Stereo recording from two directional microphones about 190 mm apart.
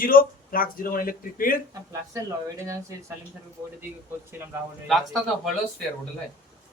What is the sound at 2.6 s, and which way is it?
Speech, 15° right (ahead or behind).